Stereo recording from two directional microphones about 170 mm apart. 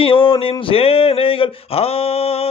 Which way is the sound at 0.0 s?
30° left (ahead or behind).